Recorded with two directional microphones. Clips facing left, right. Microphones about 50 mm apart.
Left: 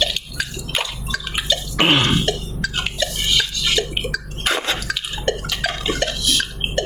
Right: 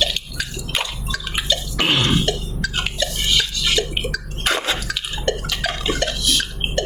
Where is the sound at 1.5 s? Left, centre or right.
Left.